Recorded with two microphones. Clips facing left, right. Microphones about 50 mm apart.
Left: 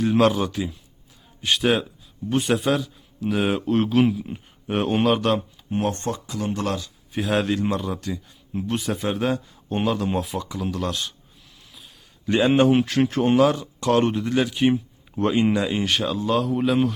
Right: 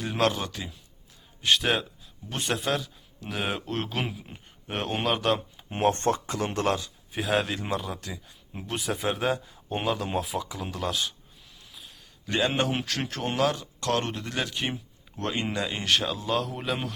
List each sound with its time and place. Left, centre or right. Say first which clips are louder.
0.0 s a man's voice: left 7 dB; centre
5.7 s speech: right 1 dB; right
7.1 s speech: left 4 dB; centre
12.2 s speech: left 8 dB; centre